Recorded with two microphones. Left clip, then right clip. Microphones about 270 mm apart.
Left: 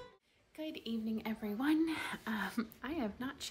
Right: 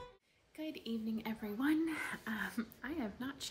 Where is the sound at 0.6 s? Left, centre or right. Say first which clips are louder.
Left 1 dB; centre.